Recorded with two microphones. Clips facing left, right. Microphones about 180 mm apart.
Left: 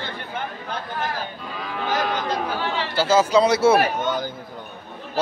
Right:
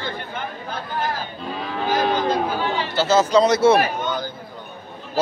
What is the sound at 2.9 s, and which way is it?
Speech, 10° left (ahead or behind).